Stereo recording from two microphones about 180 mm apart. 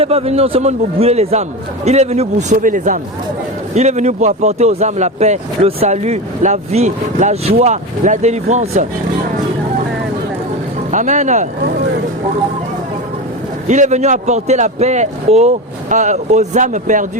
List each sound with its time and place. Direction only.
0.0 s speech: 35° right (ahead or behind)
10.9 s speech: 40° right (ahead or behind)
13.7 s speech: 40° right (ahead or behind)